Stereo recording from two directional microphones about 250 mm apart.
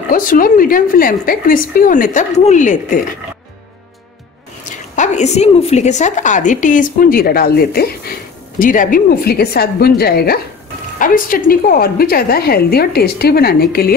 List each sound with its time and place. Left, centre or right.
0.1 s a woman's voice: left
4.6 s a woman's voice: left